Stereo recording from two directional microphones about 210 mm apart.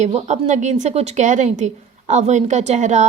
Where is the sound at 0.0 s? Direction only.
35° right (ahead or behind).